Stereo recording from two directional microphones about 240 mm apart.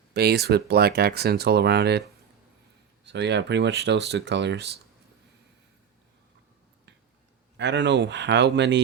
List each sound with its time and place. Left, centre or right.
0.1 s speech: right
7.5 s speech: right